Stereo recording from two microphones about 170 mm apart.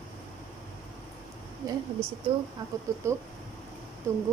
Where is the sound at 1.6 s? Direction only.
20° right (ahead or behind).